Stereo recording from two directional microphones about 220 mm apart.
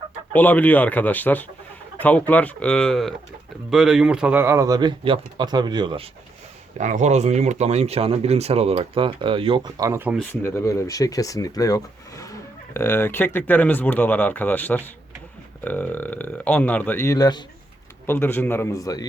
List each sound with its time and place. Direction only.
0.3 s speech: 5° left (ahead or behind); by 6.1 s 20° right (ahead or behind)
6.7 s speech: 35° right (ahead or behind); by 10.2 s 10° right (ahead or behind)
10.4 s speech: 10° left (ahead or behind)